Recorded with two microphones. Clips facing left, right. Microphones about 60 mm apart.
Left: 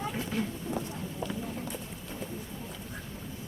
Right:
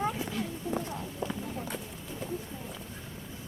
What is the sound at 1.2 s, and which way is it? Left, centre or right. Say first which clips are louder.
Clip-clop: right 1 dB; right.